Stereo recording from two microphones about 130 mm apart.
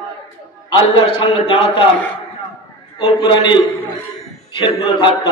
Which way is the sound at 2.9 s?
40° left (ahead or behind).